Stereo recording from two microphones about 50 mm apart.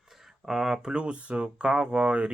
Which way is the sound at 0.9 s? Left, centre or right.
Right.